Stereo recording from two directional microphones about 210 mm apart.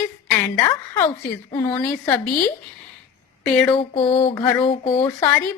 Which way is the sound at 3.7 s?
25° left (ahead or behind).